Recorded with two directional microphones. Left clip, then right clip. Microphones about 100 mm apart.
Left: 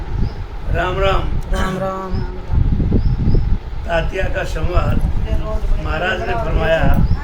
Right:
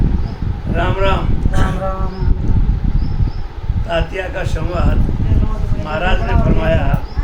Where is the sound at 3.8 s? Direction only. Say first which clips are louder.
Even; 10° left (ahead or behind).